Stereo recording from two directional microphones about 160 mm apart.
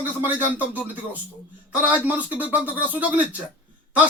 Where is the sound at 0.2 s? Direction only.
10° right (ahead or behind).